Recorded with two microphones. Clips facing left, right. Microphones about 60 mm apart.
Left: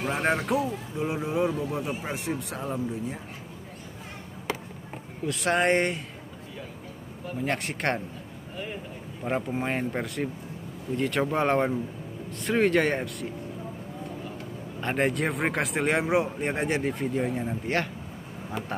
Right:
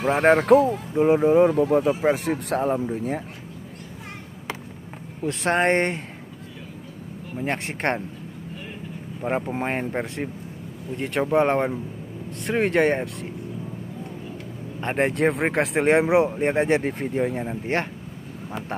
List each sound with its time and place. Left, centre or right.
0.0 s speech: right
5.2 s speech: right
7.3 s speech: right
9.2 s speech: right
14.8 s speech: right